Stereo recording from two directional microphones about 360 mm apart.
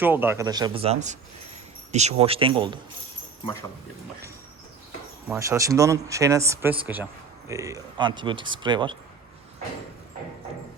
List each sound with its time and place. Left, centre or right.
0.0 s speech: centre
5.3 s speech: centre